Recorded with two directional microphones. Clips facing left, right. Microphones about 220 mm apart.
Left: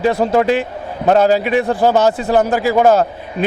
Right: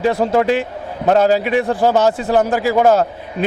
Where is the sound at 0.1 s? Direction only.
30° left (ahead or behind).